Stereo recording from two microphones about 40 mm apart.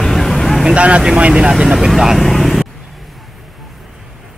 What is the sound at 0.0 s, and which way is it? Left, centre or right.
Vehicle, centre.